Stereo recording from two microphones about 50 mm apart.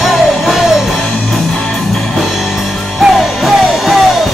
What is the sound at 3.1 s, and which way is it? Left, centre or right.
Music, centre.